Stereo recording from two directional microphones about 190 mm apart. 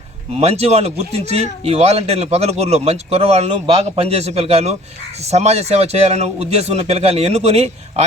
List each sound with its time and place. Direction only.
0.3 s speech: 35° right (ahead or behind)